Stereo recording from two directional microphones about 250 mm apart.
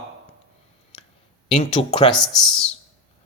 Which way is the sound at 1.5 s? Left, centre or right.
Centre.